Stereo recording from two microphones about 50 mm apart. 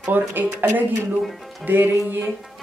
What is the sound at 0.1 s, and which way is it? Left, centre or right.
Speech, right.